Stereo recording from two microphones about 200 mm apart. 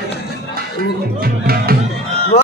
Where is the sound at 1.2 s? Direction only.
50° right (ahead or behind).